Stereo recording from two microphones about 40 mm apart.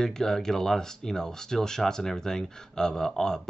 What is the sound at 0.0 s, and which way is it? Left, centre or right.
Speech, centre.